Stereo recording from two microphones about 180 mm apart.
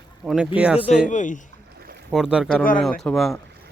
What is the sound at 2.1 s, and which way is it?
Speech, 5° right (ahead or behind).